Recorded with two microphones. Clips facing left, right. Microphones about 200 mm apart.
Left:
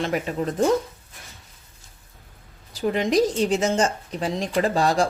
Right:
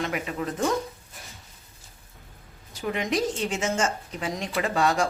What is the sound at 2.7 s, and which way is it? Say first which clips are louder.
Speech: left 6 dB; 35° left (ahead or behind).